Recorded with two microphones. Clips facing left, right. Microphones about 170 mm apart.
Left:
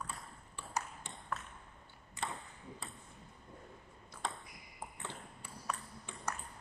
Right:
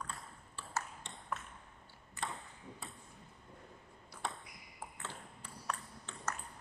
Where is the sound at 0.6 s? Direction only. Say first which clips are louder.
Left 1 dB; 15° left (ahead or behind).